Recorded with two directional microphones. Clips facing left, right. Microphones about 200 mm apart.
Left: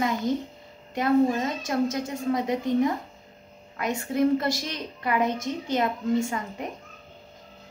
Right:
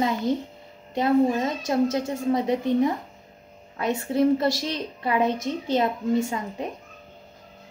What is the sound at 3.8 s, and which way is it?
A woman's voice, 25° right (ahead or behind).